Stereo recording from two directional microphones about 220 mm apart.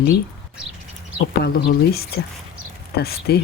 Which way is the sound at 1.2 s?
45° left (ahead or behind).